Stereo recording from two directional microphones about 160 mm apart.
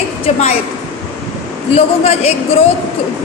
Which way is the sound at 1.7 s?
40° left (ahead or behind).